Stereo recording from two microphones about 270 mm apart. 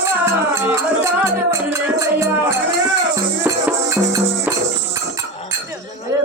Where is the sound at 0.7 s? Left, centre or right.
Centre.